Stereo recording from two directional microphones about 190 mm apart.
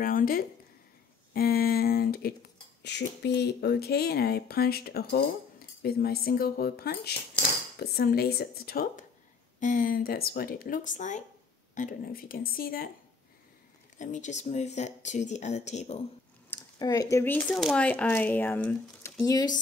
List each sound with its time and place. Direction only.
0.0 s speech: 50° left (ahead or behind)
1.3 s a sound: 55° left (ahead or behind)
2.8 s speech: 65° left (ahead or behind)
13.9 s speech: 40° left (ahead or behind)
16.4 s a sound: 20° left (ahead or behind)
17.5 s speech: centre (ahead or behind)
19.2 s speech: 20° left (ahead or behind)